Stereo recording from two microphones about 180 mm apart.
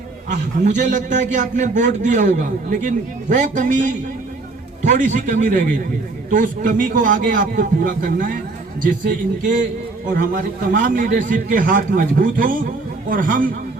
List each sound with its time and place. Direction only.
0.3 s a man's voice: 40° right (ahead or behind)
10.8 s a man's voice: 50° right (ahead or behind)